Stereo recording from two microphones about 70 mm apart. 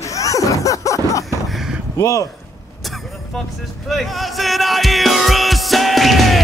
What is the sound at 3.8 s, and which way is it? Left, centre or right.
Music, centre.